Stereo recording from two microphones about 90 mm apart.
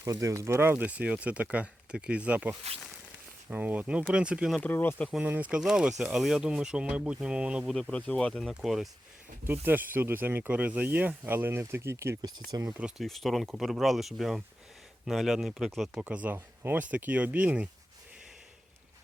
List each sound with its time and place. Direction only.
0.0 s speech: 40° right (ahead or behind); by 4.5 s 10° right (ahead or behind)
4.6 s speech: 25° left (ahead or behind)
5.2 s speech: 15° right (ahead or behind)
7.7 s speech: 10° left (ahead or behind)
9.4 s speech: 25° right (ahead or behind)
12.5 s speech: 45° right (ahead or behind)
12.8 s speech: centre (ahead or behind)
16.0 s speech: 15° right (ahead or behind)